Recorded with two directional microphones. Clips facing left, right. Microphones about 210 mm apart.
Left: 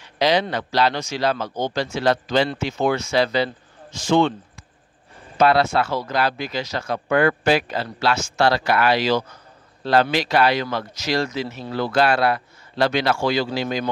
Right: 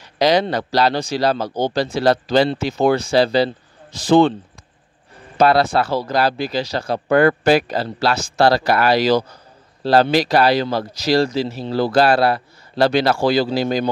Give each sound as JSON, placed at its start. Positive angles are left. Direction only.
{"t": 0.0, "sound": "speech", "side_deg": -40}
{"t": 5.4, "sound": "speech", "side_deg": -35}